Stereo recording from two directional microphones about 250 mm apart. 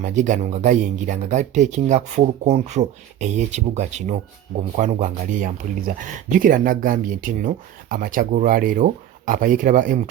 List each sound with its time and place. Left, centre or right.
0.0 s speech: right